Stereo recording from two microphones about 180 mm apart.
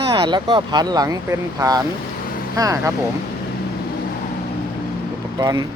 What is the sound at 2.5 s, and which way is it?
Speech, 20° right (ahead or behind).